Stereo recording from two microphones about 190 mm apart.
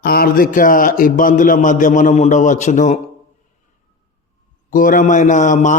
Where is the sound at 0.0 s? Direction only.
50° left (ahead or behind).